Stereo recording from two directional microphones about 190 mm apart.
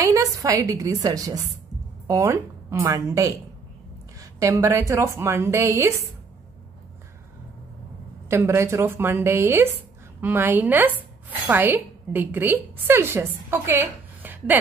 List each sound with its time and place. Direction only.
0.0 s a woman's voice: 15° right (ahead or behind)
8.3 s a woman's voice: 15° right (ahead or behind)